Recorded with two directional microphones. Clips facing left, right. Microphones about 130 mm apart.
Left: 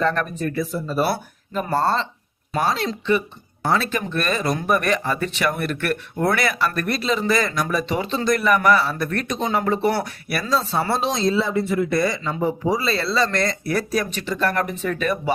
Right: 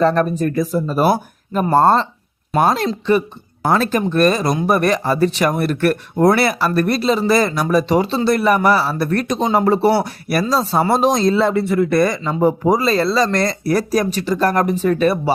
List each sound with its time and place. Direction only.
0.0 s speech: 35° right (ahead or behind)